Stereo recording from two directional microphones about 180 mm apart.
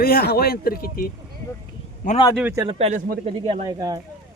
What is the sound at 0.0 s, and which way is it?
A man's voice, 55° left (ahead or behind).